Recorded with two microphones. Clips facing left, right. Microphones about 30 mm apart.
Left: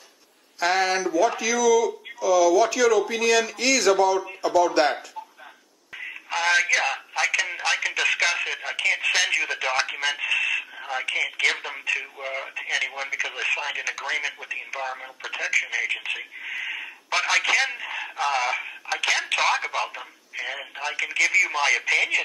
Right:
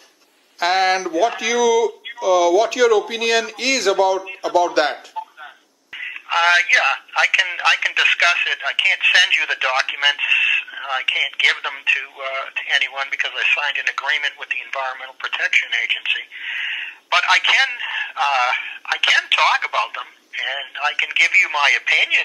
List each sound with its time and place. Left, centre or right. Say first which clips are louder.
0.6 s speech: right 5 dB; right
4.1 s speech: right 3 dB; right
5.9 s speech: right 8 dB; right
10.3 s radio: right 6 dB; right
10.6 s speech: right 7 dB; right